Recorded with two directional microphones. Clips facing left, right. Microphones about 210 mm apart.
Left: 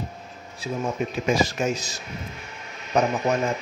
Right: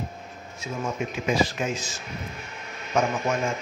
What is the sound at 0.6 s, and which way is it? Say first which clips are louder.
Speech: left 3 dB; 35° left (ahead or behind).